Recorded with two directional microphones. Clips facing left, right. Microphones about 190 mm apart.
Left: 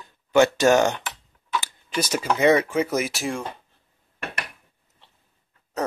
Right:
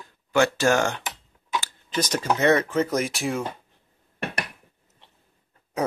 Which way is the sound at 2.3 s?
10° left (ahead or behind).